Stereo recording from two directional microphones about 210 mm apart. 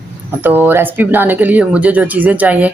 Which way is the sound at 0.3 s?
10° right (ahead or behind).